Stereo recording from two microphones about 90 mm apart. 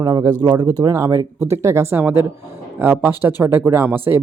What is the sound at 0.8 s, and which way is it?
Speech, 35° right (ahead or behind).